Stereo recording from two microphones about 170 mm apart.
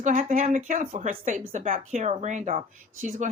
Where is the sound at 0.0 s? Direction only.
45° right (ahead or behind).